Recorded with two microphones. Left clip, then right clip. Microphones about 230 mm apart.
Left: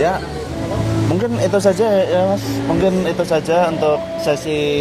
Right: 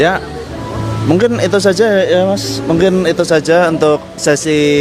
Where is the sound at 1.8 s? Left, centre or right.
Right.